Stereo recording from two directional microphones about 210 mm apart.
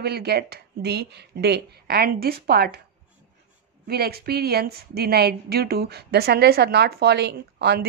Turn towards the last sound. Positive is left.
turn(degrees=-50)  # may be behind; listen again after turning